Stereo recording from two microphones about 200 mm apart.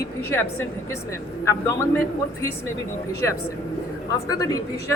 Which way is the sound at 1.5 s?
15° left (ahead or behind).